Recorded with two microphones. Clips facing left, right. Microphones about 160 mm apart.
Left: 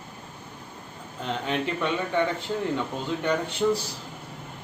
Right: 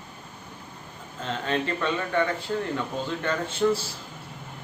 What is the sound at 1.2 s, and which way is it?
Speech, 15° left (ahead or behind).